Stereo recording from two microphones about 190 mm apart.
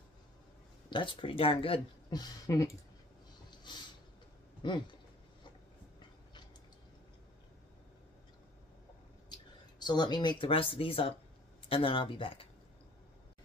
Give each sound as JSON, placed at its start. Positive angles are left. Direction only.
{"t": 0.8, "sound": "speech", "side_deg": 25}
{"t": 9.8, "sound": "speech", "side_deg": 20}